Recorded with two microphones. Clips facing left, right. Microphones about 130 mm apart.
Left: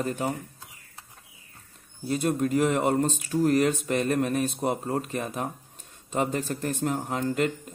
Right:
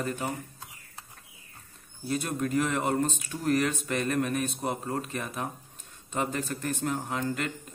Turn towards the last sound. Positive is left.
turn(degrees=40)  # may be behind; listen again after turning